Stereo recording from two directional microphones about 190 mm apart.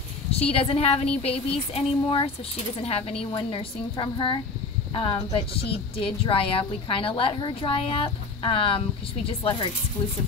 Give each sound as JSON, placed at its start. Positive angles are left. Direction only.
{"t": 0.3, "sound": "a woman's voice", "side_deg": 30}